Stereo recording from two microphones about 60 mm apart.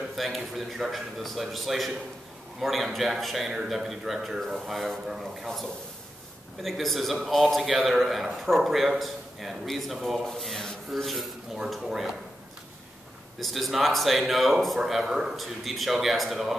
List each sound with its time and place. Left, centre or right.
0.1 s a man's voice: centre
13.4 s a man's voice: centre